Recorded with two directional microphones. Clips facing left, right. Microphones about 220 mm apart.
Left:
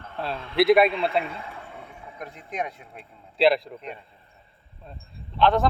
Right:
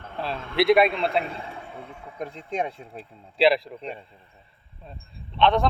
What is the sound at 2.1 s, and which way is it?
Speech, 30° right (ahead or behind).